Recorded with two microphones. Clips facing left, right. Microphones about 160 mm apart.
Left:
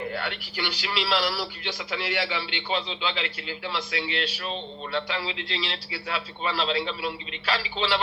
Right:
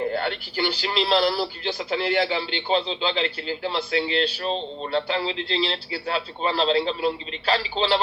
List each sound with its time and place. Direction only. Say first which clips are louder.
0.0 s speech: right 6 dB; 35° right (ahead or behind)